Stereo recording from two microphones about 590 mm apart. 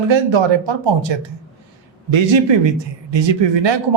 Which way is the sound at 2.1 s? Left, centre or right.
Right.